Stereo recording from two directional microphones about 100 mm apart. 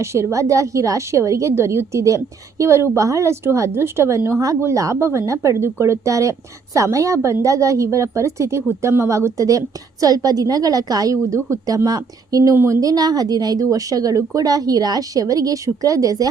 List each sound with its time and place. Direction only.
0.0 s a woman's voice: 30° right (ahead or behind)